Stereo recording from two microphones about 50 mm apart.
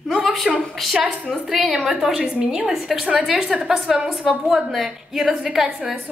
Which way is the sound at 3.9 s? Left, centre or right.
Centre.